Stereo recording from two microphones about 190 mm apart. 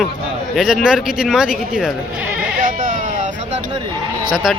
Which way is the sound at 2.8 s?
40° right (ahead or behind).